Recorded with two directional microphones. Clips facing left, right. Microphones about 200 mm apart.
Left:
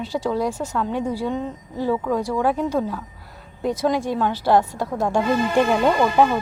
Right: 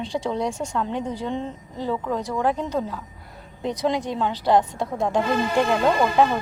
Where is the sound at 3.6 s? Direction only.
20° right (ahead or behind).